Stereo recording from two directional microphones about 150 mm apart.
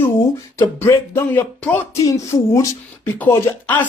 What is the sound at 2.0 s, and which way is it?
Speech, 20° left (ahead or behind).